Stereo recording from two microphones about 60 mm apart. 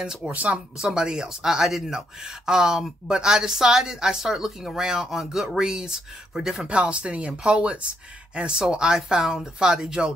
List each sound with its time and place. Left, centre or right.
0.0 s speech: centre
0.3 s speech: right
0.7 s speech: centre
6.7 s speech: centre